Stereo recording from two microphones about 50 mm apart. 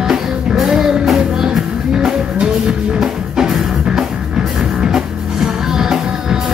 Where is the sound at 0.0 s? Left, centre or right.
Centre.